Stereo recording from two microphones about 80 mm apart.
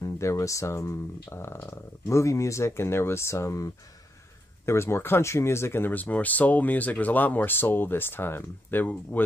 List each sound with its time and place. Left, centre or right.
0.0 s speech: left